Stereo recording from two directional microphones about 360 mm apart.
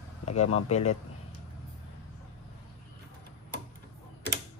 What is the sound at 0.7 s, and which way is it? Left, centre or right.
Speech, centre.